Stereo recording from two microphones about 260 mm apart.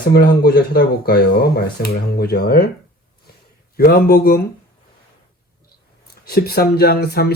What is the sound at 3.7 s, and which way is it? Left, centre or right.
Speech, left.